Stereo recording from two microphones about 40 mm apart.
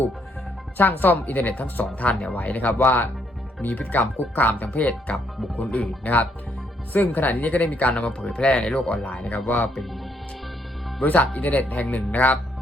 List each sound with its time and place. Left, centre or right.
0.8 s speech: left
2.0 s speech: left
6.9 s speech: left
11.0 s speech: left